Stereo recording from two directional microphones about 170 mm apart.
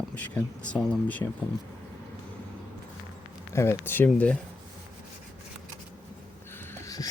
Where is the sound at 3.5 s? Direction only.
15° left (ahead or behind).